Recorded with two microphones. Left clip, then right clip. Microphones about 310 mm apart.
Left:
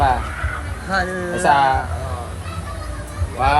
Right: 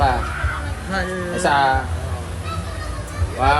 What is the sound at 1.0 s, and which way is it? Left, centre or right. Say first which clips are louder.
Speech: left 2 dB; centre.